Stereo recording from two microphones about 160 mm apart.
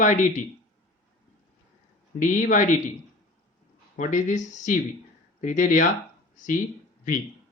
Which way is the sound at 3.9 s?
50° left (ahead or behind).